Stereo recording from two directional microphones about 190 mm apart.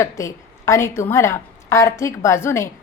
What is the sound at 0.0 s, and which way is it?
A woman's voice, 15° left (ahead or behind).